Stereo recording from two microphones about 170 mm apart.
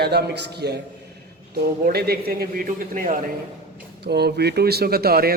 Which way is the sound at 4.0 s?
75° right (ahead or behind).